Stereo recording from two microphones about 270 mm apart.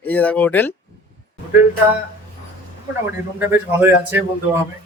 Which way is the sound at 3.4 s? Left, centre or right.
Centre.